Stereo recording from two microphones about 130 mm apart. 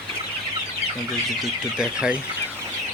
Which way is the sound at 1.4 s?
5° right (ahead or behind).